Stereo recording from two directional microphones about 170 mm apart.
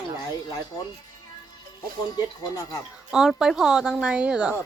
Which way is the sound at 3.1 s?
Centre (ahead or behind).